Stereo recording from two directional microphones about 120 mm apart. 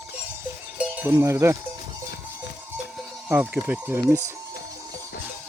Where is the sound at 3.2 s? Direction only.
15° right (ahead or behind).